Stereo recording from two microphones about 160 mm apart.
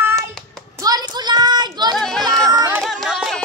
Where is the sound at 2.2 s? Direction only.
25° right (ahead or behind).